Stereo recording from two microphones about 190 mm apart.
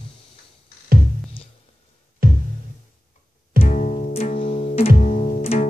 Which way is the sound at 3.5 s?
40° left (ahead or behind).